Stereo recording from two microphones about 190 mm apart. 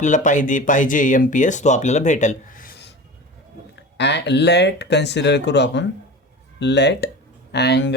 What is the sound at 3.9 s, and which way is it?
Speech, 65° left (ahead or behind).